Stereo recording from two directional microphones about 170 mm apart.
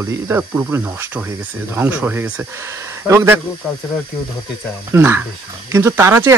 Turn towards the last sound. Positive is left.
turn(degrees=-15)  # may be behind; listen again after turning